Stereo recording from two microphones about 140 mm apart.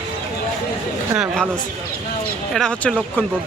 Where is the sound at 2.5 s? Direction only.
5° left (ahead or behind).